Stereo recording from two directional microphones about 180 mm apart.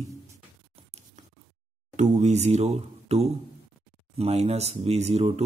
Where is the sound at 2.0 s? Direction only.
40° right (ahead or behind).